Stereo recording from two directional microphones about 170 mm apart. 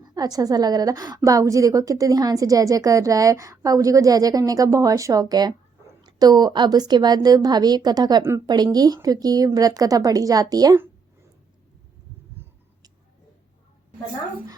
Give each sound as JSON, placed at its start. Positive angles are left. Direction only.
{"t": 0.0, "sound": "a woman's voice", "side_deg": -25}